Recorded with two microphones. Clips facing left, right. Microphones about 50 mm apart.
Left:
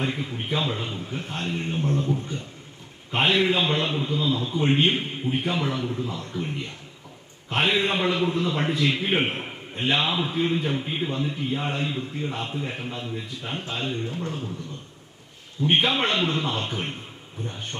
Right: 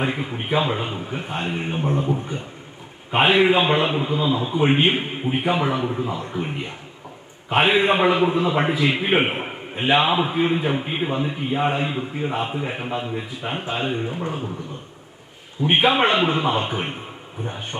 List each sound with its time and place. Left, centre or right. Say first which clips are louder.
0.0 s a man's voice: right 4 dB; right
15.6 s a man's voice: right 5 dB; centre